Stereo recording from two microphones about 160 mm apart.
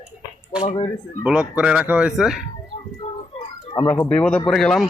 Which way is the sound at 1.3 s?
5° right (ahead or behind).